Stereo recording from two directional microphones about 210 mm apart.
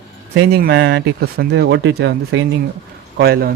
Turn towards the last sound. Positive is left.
turn(degrees=-50)  # may be behind; listen again after turning